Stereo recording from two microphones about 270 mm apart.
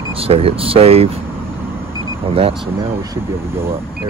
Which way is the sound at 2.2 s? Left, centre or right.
Right.